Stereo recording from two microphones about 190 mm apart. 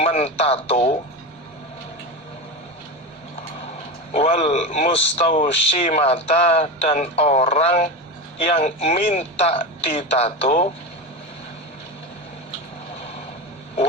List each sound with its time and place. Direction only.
0.0 s a man's voice: 35° left (ahead or behind)
4.1 s a man's voice: 40° left (ahead or behind)